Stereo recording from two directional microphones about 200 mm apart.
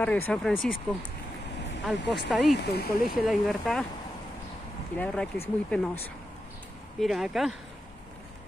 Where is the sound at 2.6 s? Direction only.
50° left (ahead or behind).